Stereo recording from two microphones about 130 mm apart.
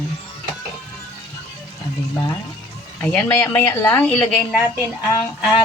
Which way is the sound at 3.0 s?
5° left (ahead or behind).